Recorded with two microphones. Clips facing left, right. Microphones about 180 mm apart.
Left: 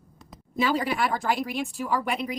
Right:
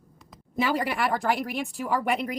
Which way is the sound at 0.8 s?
60° right (ahead or behind).